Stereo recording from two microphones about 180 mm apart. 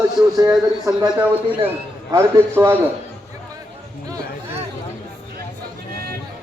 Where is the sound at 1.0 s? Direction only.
25° right (ahead or behind).